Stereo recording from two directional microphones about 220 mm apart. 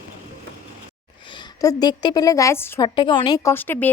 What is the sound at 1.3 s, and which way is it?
A woman's voice, 20° left (ahead or behind).